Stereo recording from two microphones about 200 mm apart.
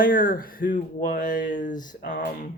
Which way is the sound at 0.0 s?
45° left (ahead or behind).